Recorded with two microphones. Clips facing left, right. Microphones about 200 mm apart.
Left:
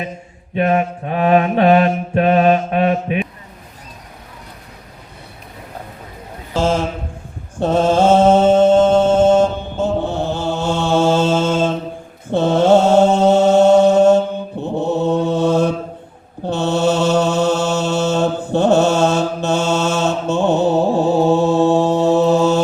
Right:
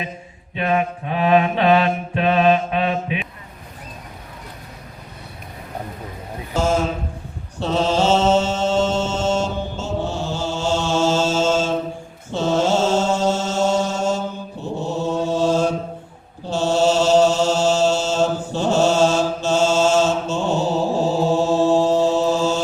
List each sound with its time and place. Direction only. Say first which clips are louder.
0.5 s mantra: left 4 dB; 45° left (ahead or behind)
7.6 s mantra: left 5 dB; 50° left (ahead or behind)